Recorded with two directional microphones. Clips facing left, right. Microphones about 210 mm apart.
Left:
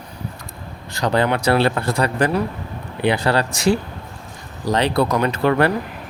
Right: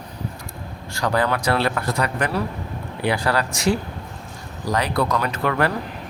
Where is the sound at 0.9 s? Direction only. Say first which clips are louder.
Left 3 dB; 25° left (ahead or behind).